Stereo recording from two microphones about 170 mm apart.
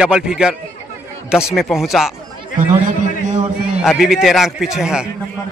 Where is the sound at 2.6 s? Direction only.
45° right (ahead or behind).